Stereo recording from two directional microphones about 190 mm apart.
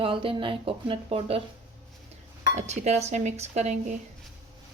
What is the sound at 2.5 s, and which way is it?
A woman's voice, 35° right (ahead or behind).